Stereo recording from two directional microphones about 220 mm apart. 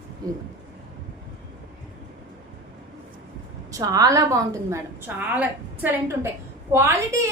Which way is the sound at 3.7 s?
15° right (ahead or behind).